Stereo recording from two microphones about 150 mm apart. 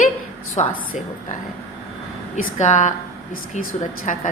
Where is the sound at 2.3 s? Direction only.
55° left (ahead or behind).